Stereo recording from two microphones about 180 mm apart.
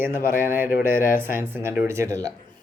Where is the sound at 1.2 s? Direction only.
10° right (ahead or behind).